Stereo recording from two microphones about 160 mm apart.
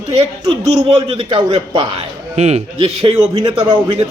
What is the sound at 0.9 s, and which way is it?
A man's voice, 35° right (ahead or behind).